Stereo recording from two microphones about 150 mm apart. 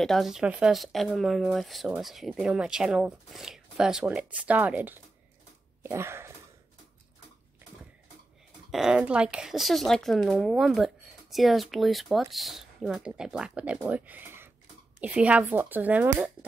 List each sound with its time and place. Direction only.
0.0 s speech: centre (ahead or behind); by 6.3 s 15° right (ahead or behind)
8.7 s a woman's voice: 5° right (ahead or behind)